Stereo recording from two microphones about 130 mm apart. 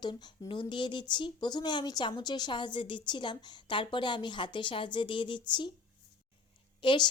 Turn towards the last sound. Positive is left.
turn(degrees=40)  # may be behind; listen again after turning